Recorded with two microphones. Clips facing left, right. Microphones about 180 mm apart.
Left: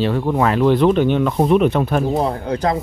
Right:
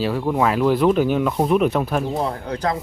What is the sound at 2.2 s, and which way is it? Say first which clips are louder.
Speech: left 4 dB; 20° left (ahead or behind).